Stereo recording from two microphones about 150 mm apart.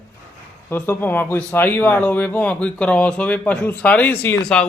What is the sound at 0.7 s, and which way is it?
A man's voice, 15° left (ahead or behind).